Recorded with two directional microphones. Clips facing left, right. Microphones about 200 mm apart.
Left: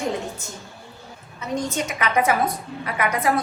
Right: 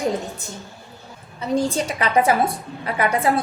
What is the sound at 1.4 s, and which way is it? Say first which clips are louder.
A woman's voice: right 5 dB; 30° right (ahead or behind).